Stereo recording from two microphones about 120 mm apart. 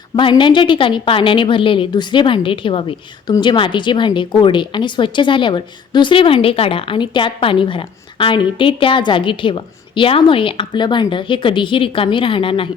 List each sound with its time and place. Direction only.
0.2 s a woman's voice: 45° left (ahead or behind)